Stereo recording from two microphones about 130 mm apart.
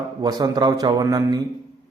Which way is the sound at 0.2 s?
30° right (ahead or behind).